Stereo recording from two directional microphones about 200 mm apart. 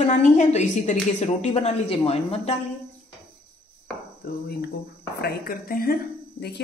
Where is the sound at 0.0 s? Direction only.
35° left (ahead or behind).